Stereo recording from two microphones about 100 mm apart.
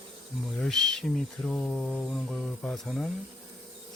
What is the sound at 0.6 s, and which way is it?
Mantra, 5° left (ahead or behind).